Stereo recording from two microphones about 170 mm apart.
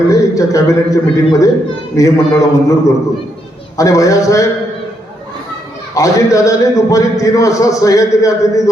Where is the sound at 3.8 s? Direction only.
20° left (ahead or behind).